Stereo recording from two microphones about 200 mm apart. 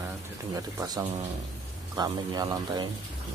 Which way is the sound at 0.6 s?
20° right (ahead or behind).